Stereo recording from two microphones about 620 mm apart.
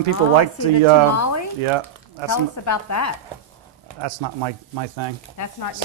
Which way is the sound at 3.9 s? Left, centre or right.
Right.